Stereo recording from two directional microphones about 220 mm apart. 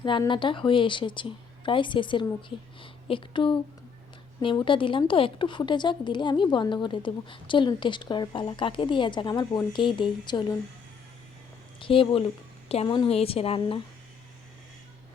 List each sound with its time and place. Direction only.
0.0 s speech: 20° left (ahead or behind)
11.8 s speech: 25° left (ahead or behind)